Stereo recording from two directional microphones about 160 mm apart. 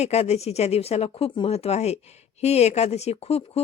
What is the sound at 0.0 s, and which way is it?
Speech, 40° left (ahead or behind).